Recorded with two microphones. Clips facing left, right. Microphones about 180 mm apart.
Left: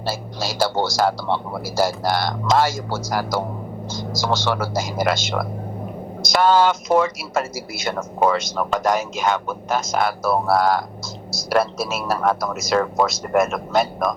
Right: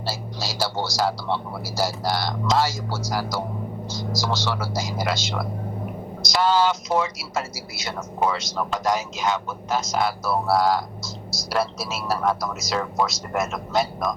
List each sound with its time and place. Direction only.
0.0 s speech: 50° left (ahead or behind)